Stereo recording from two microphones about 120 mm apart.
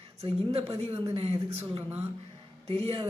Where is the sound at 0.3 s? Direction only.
55° right (ahead or behind).